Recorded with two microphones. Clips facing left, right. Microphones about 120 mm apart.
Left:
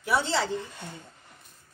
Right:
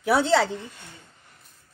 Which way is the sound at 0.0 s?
60° right (ahead or behind).